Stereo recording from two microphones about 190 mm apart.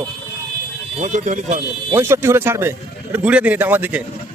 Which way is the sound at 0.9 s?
40° right (ahead or behind).